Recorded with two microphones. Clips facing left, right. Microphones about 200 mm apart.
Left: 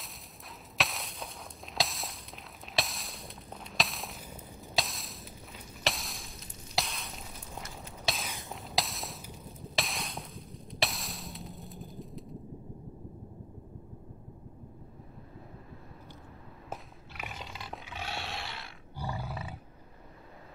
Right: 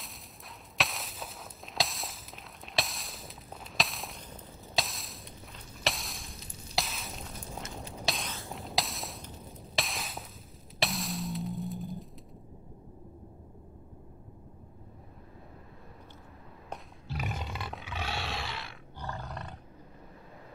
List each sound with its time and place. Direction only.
0.7 s walk: centre (ahead or behind)
8.0 s a sound: centre (ahead or behind)
9.8 s music: centre (ahead or behind)
17.1 s a sound: 45° right (ahead or behind); by 17.7 s 60° right (ahead or behind)
17.8 s roar: 90° right
18.9 s roar: 10° left (ahead or behind)